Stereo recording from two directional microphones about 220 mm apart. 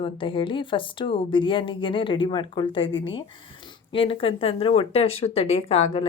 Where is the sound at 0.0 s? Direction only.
25° left (ahead or behind).